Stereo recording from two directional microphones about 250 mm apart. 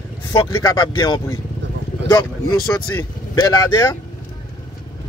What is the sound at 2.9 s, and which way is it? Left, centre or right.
Speech, centre.